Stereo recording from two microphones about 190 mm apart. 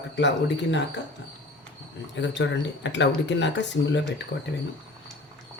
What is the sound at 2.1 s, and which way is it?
Speech, 70° left (ahead or behind).